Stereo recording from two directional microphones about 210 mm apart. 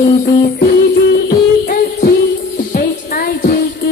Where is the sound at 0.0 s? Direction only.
50° left (ahead or behind).